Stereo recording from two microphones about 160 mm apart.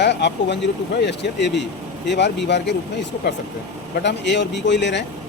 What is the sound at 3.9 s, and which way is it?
Speech, 90° left.